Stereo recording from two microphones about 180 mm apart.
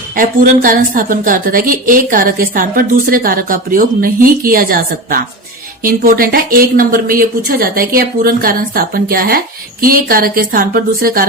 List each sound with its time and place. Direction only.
0.2 s a woman's voice: 50° right (ahead or behind)